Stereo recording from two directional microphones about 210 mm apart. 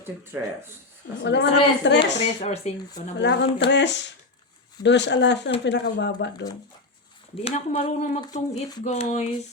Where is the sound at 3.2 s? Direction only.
55° left (ahead or behind).